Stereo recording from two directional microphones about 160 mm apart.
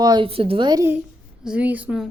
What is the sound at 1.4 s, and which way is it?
Speech, 10° right (ahead or behind).